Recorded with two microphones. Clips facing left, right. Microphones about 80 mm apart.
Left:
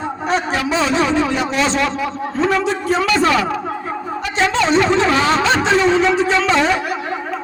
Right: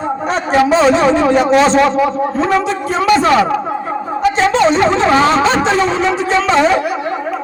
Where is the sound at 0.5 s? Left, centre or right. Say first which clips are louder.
Right 12 dB; right.